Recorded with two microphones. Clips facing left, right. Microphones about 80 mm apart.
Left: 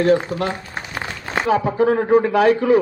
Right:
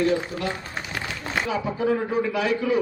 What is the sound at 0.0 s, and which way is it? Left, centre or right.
A man's voice, left.